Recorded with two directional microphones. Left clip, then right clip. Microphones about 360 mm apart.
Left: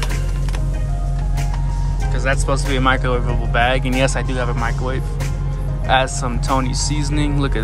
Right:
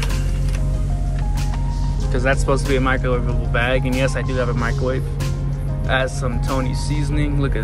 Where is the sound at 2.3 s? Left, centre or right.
Centre.